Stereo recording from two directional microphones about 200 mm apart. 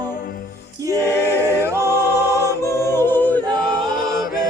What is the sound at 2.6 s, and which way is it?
Yodeling, 15° left (ahead or behind).